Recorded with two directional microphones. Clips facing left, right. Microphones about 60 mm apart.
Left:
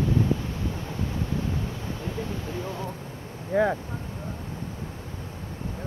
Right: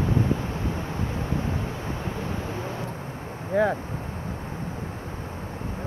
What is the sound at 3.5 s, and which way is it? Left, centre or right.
Speech, centre.